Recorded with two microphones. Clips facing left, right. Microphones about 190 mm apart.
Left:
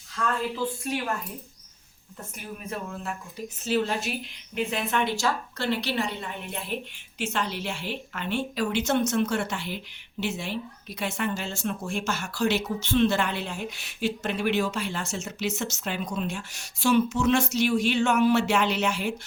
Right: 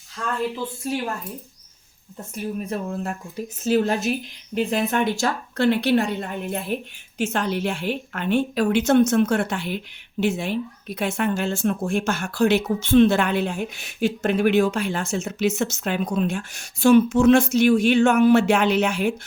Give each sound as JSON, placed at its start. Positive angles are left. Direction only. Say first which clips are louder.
{"t": 2.3, "sound": "a woman's voice", "louder": "right 9 dB", "side_deg": -40}